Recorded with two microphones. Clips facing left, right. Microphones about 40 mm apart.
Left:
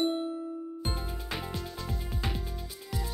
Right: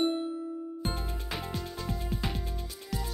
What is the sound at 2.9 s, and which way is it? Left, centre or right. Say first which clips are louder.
Music: right 1 dB; centre.